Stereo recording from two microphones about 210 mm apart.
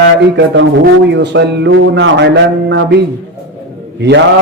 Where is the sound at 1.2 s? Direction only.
55° right (ahead or behind).